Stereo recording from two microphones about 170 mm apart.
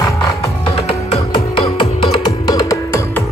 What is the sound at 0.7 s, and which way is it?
Music, 35° left (ahead or behind).